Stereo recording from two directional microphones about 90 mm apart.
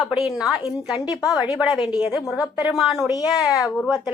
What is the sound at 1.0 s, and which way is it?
Speech, 40° left (ahead or behind).